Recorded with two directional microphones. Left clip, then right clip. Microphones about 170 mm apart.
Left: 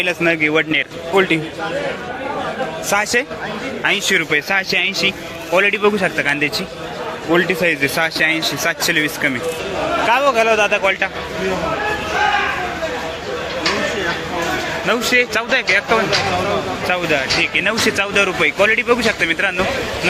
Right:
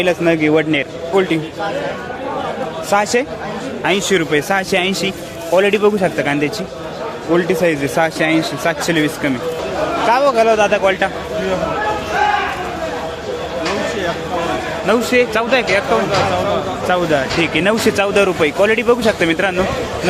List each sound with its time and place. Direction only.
0.0 s speech: 5° right (ahead or behind)
2.9 s speech: 5° right (ahead or behind)
14.8 s a man's voice: 5° right (ahead or behind)
16.9 s speech: 20° right (ahead or behind)